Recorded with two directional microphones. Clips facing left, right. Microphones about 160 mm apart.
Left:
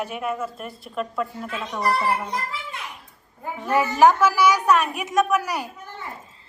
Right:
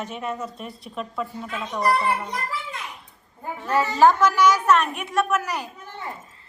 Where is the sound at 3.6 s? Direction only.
15° left (ahead or behind).